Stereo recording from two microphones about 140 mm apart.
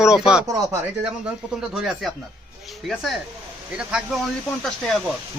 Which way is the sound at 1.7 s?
5° right (ahead or behind).